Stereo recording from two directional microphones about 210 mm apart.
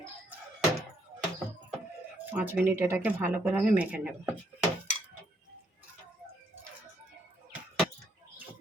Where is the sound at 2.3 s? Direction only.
10° right (ahead or behind).